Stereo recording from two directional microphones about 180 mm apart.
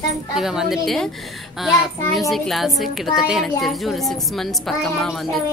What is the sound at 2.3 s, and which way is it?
Speech, centre (ahead or behind).